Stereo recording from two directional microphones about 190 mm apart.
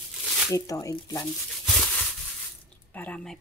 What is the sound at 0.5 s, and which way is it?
Speech, 20° left (ahead or behind).